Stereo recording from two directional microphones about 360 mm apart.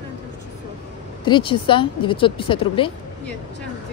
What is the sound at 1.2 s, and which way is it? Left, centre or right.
Speech, centre.